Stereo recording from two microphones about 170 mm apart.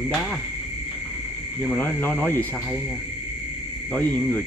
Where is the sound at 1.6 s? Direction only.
10° left (ahead or behind).